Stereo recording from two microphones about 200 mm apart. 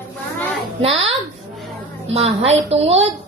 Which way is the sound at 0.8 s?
30° right (ahead or behind).